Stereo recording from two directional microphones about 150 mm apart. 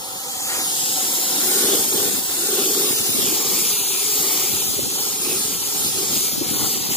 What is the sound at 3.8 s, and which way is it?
Steam, 35° left (ahead or behind).